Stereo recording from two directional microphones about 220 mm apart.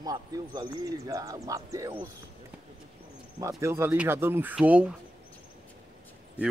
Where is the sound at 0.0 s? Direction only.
15° right (ahead or behind).